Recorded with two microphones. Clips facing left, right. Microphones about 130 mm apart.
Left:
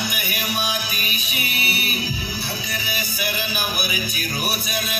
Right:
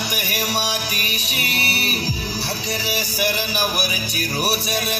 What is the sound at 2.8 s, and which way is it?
Music, 80° right.